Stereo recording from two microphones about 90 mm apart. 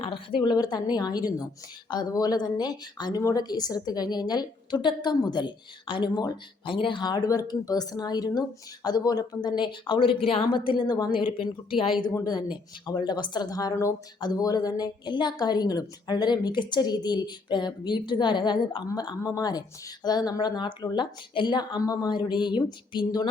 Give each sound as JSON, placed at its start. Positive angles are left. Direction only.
{"t": 0.0, "sound": "a woman's voice", "side_deg": 75}
{"t": 9.8, "sound": "speech", "side_deg": 75}
{"t": 11.1, "sound": "speech", "side_deg": 70}
{"t": 12.2, "sound": "a woman's voice", "side_deg": 50}
{"t": 14.2, "sound": "speech", "side_deg": 55}
{"t": 14.4, "sound": "a woman's voice", "side_deg": 45}